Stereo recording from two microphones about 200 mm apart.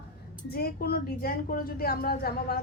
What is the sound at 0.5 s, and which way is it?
A woman's voice, 50° left (ahead or behind).